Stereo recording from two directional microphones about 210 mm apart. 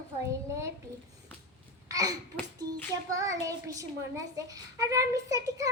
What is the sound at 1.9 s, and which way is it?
Babbling, 15° right (ahead or behind).